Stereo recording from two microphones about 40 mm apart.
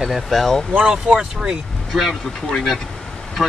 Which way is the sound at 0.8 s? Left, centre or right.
Right.